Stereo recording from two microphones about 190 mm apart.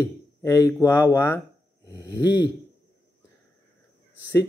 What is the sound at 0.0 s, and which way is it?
Speech, 15° left (ahead or behind).